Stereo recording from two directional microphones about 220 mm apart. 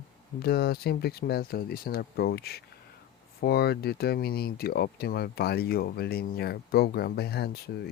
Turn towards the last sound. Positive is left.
turn(degrees=45)  # may be behind; listen again after turning